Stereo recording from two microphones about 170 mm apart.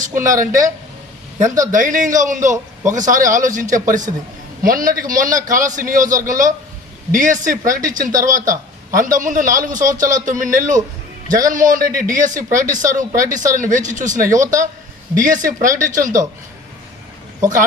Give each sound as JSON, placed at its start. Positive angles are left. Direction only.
{"t": 0.1, "sound": "speech", "side_deg": -20}
{"t": 1.4, "sound": "a man's voice", "side_deg": -45}